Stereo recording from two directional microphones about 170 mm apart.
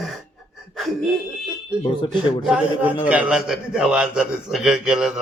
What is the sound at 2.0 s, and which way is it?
Speech, 30° left (ahead or behind).